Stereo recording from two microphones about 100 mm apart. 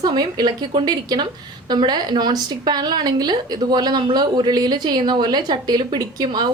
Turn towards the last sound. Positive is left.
turn(degrees=-45)  # may be behind; listen again after turning